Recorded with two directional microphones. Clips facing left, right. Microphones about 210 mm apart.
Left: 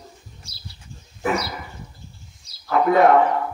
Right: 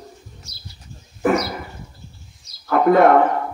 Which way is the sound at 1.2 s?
50° right (ahead or behind).